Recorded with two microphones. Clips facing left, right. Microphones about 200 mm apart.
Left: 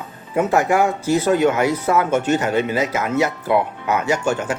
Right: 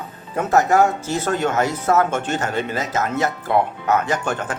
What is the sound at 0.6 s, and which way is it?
Speech, 40° right (ahead or behind).